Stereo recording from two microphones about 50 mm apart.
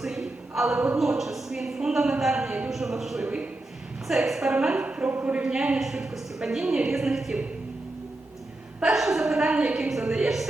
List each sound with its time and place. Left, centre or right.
0.0 s a sound: centre
0.9 s a woman's voice: centre
3.2 s a woman's voice: right
4.1 s a woman's voice: centre; by 5.5 s right
5.8 s a woman's voice: centre
8.8 s a woman's voice: centre